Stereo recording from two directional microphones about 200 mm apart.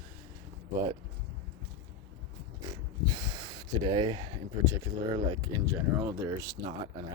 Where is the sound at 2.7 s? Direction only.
20° right (ahead or behind).